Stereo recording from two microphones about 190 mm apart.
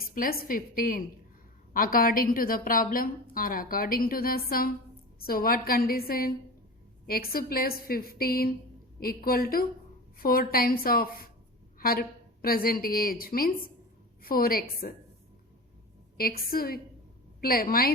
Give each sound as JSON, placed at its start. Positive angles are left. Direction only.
{"t": 0.1, "sound": "a woman's voice", "side_deg": 50}
{"t": 16.1, "sound": "a woman's voice", "side_deg": 50}